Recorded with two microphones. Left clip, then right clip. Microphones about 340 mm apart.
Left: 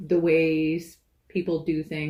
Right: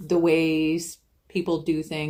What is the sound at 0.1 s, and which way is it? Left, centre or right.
Speech, centre.